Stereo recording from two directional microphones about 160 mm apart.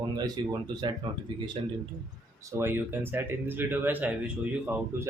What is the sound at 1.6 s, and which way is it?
Speech, 35° right (ahead or behind).